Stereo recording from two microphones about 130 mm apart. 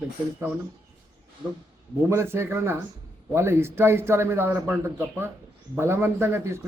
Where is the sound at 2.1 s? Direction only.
20° right (ahead or behind).